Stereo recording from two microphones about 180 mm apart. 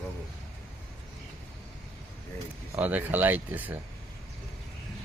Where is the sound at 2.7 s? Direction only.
10° right (ahead or behind).